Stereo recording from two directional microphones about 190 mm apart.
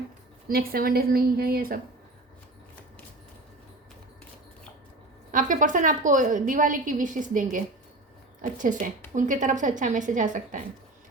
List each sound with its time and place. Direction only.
0.4 s a woman's voice: 50° right (ahead or behind)
5.3 s a woman's voice: 45° right (ahead or behind)